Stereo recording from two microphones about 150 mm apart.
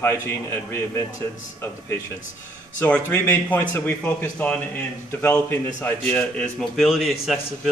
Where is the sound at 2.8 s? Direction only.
10° left (ahead or behind).